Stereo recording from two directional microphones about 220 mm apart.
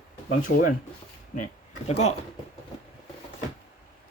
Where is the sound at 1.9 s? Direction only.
30° left (ahead or behind).